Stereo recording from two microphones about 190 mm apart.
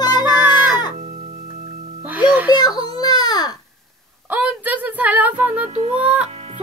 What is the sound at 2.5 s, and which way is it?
Baby cry, 20° left (ahead or behind).